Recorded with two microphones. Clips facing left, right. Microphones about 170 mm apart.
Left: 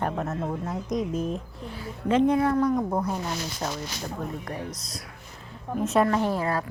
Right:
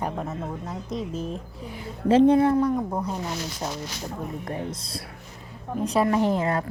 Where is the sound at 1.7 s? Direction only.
20° right (ahead or behind).